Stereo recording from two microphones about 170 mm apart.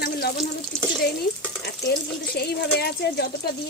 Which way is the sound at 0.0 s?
70° left (ahead or behind).